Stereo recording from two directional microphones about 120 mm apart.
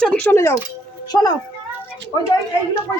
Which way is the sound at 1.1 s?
35° left (ahead or behind).